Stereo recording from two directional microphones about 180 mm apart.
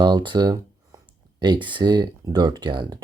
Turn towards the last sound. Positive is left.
turn(degrees=-25)  # may be behind; listen again after turning